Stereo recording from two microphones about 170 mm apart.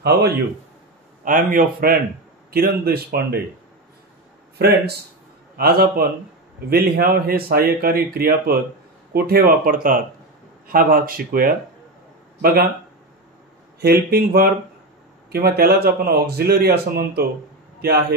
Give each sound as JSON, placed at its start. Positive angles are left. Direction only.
{"t": 0.0, "sound": "a man's voice", "side_deg": -70}
{"t": 1.5, "sound": "a man's voice", "side_deg": -55}
{"t": 4.6, "sound": "a man's voice", "side_deg": -70}
{"t": 14.1, "sound": "a man's voice", "side_deg": -65}